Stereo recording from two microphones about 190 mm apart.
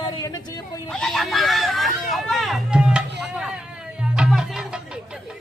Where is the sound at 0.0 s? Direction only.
20° left (ahead or behind).